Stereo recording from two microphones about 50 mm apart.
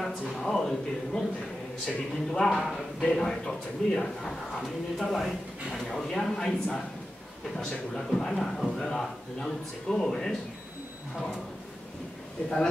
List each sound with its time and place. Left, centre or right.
0.0 s speech: centre